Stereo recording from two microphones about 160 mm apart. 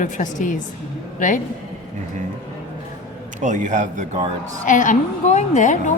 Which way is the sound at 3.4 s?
50° right (ahead or behind).